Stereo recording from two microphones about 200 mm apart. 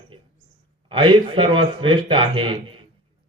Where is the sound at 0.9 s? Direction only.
25° right (ahead or behind).